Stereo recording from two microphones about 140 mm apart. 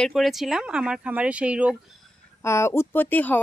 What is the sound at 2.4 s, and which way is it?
Speech, 20° left (ahead or behind).